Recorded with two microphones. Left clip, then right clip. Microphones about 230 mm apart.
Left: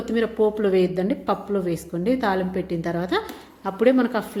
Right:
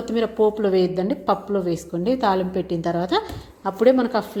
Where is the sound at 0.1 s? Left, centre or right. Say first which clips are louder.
Right 1 dB; centre.